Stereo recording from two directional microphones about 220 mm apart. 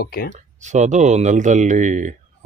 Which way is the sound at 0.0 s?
45° left (ahead or behind).